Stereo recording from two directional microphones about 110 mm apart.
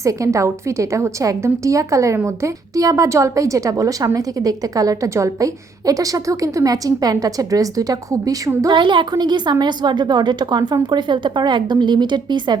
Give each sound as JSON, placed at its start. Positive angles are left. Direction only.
{"t": 0.0, "sound": "a woman's voice", "side_deg": -30}
{"t": 8.7, "sound": "a woman's voice", "side_deg": -45}